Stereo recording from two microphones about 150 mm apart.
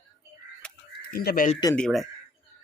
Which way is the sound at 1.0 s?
75° left (ahead or behind).